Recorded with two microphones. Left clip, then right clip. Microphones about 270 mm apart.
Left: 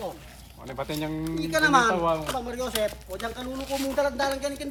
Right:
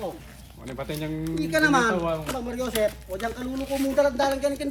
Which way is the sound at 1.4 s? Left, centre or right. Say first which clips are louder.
Even; centre.